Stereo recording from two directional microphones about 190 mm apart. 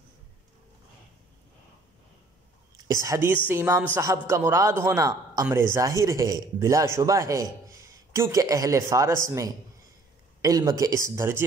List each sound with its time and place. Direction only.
2.9 s a man's voice: 15° right (ahead or behind)